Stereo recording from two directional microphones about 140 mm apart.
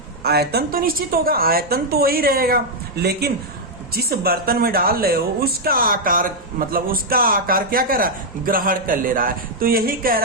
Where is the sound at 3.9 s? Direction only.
90° right.